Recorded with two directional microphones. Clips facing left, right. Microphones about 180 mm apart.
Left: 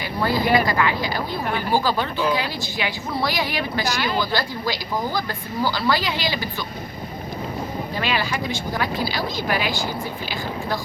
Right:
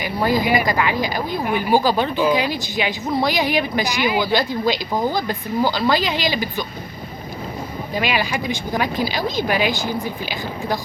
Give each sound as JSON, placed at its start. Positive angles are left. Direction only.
{"t": 0.0, "sound": "a woman's voice", "side_deg": -15}
{"t": 7.9, "sound": "a woman's voice", "side_deg": -15}